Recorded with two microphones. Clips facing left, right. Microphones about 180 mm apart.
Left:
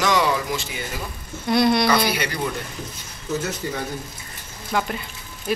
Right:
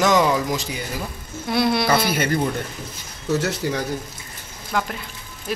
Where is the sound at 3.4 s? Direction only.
75° right (ahead or behind).